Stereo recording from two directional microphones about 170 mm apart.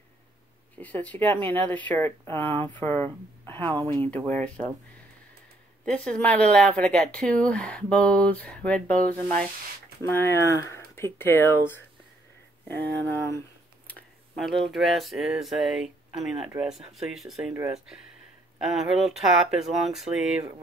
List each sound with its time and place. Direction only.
0.7 s speech: 10° left (ahead or behind)
5.9 s speech: 5° left (ahead or behind)
12.6 s speech: 10° left (ahead or behind)